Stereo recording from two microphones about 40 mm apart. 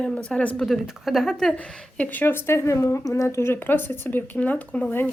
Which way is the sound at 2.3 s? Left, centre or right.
Left.